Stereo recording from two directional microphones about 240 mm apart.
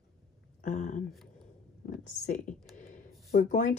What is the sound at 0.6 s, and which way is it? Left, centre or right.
Speech, left.